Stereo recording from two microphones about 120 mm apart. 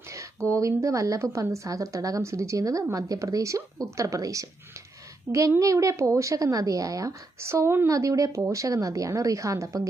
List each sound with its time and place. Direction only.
0.1 s a woman's voice: 25° right (ahead or behind)
5.5 s a woman's voice: 25° right (ahead or behind)